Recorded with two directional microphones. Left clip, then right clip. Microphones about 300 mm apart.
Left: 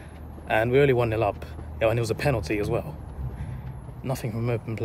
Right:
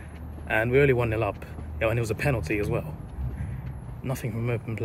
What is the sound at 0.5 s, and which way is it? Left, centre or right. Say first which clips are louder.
Speech: left 1 dB; centre.